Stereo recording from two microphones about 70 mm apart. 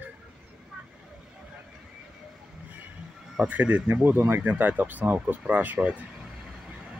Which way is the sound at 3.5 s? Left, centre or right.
Centre.